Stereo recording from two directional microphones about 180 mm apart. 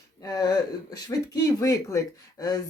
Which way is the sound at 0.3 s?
20° left (ahead or behind).